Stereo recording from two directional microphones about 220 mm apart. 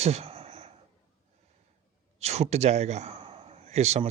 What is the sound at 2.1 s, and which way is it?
A man's voice, 30° right (ahead or behind).